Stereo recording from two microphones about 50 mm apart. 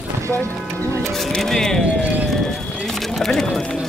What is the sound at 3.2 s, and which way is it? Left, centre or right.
Speech, centre.